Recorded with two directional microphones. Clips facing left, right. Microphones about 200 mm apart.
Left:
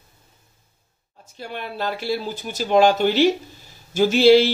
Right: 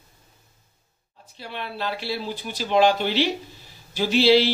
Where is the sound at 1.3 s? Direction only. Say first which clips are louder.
Left 3 dB; 45° left (ahead or behind).